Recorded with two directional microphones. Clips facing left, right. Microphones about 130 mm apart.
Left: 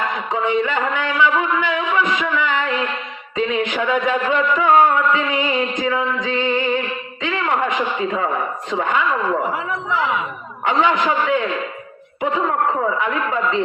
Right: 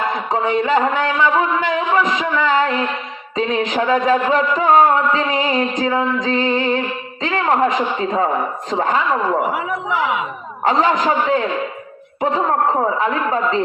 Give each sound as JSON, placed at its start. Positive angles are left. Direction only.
{"t": 0.3, "sound": "a man's voice", "side_deg": -35}
{"t": 9.4, "sound": "a man's voice", "side_deg": -10}
{"t": 10.6, "sound": "a man's voice", "side_deg": -35}